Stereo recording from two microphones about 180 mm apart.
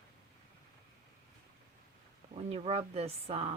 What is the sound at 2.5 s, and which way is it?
Speech, 35° right (ahead or behind).